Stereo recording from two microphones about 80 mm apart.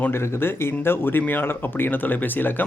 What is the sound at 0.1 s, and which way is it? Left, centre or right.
Speech, left.